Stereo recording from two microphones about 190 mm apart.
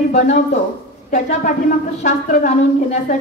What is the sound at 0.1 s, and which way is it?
Speech, 40° left (ahead or behind).